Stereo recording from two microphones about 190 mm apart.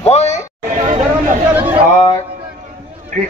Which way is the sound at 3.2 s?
45° right (ahead or behind).